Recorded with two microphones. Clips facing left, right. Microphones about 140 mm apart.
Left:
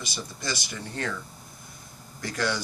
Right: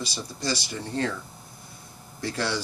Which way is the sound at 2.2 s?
30° right (ahead or behind).